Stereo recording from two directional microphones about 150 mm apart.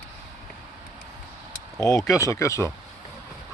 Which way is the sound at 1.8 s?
20° left (ahead or behind).